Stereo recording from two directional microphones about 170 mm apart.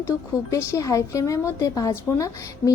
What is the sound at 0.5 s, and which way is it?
A woman's voice, 20° left (ahead or behind).